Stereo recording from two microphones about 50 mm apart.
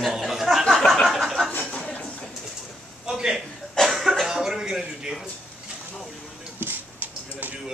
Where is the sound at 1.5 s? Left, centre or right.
Left.